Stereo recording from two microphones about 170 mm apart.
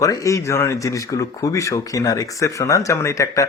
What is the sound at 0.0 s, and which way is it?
Speech, 20° left (ahead or behind).